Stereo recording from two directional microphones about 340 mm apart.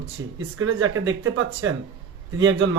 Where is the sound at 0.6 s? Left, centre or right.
Right.